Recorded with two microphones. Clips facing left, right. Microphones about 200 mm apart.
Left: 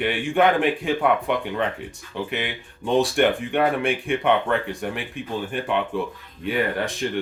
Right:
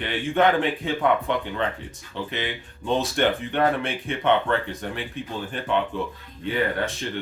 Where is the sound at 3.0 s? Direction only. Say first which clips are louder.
Left 3 dB; 15° left (ahead or behind).